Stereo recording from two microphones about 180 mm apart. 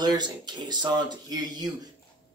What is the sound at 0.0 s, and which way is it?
Speech, 25° right (ahead or behind).